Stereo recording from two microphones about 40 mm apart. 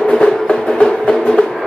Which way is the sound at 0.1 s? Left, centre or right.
Centre.